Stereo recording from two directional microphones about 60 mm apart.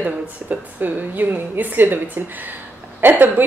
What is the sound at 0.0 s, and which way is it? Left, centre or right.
A woman's voice, right.